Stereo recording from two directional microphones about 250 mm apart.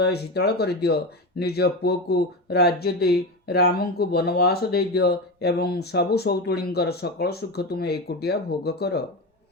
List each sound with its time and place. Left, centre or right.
0.0 s speech: left